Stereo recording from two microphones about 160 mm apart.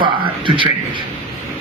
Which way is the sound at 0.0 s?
30° right (ahead or behind).